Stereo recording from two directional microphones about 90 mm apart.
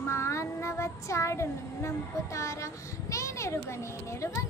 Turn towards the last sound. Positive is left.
turn(degrees=35)  # may be behind; listen again after turning